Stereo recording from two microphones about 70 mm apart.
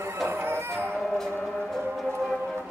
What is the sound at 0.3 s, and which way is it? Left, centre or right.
Music, right.